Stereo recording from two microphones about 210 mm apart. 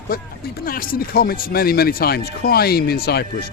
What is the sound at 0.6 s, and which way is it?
Speech, 45° left (ahead or behind).